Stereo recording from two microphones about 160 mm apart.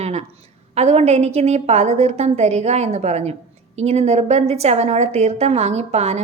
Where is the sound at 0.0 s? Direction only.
40° right (ahead or behind).